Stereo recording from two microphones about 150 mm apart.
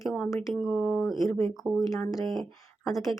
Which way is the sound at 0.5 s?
Centre (ahead or behind).